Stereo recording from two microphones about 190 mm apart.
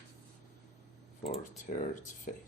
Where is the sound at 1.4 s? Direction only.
40° left (ahead or behind).